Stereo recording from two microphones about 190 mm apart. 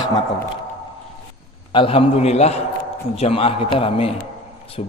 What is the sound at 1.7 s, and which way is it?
A man's voice, 30° left (ahead or behind).